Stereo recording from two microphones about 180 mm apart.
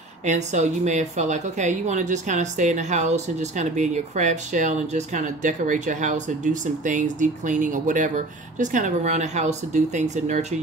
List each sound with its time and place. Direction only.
0.2 s speech: 40° right (ahead or behind)